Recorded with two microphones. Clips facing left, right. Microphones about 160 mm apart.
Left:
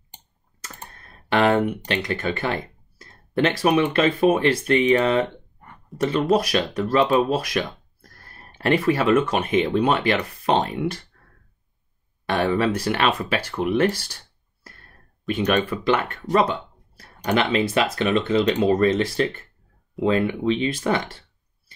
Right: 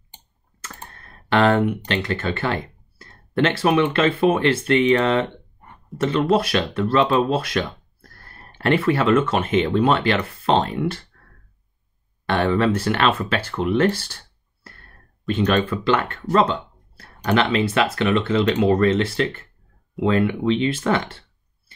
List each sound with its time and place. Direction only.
1.3 s speech: 15° left (ahead or behind)
12.3 s speech: 15° left (ahead or behind)
15.2 s speech: 15° left (ahead or behind)